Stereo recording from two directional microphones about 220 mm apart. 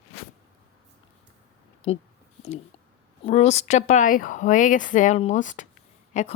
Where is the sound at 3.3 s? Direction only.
30° left (ahead or behind).